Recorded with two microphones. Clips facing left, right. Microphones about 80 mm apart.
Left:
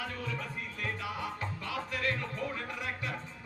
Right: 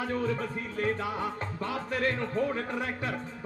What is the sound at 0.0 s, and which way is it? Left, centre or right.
Music, right.